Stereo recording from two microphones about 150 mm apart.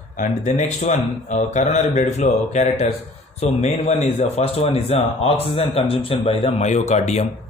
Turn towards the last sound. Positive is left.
turn(degrees=50)  # may be behind; listen again after turning